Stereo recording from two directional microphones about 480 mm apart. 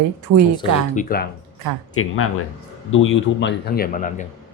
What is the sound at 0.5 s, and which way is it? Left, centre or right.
Speech, centre.